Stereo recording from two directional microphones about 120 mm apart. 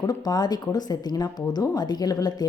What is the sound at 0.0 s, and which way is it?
A woman's voice, 30° left (ahead or behind).